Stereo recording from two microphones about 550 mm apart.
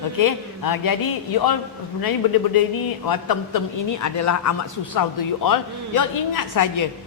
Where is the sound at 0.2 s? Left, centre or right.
Left.